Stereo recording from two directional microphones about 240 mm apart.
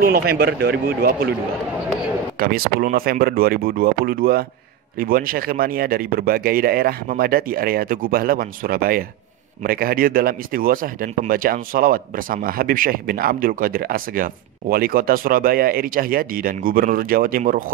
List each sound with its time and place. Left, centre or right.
0.0 s speech: right
2.3 s speech: right